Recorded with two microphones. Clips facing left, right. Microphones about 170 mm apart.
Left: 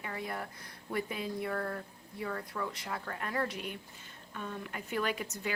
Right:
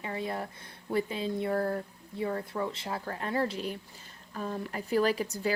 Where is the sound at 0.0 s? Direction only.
25° right (ahead or behind).